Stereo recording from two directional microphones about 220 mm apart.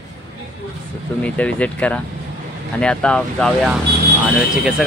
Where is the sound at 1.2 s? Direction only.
5° left (ahead or behind).